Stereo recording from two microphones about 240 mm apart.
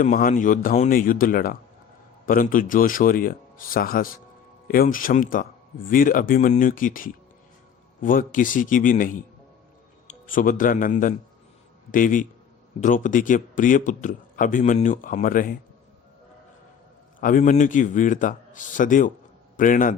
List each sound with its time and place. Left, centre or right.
0.0 s speech: left
17.2 s speech: left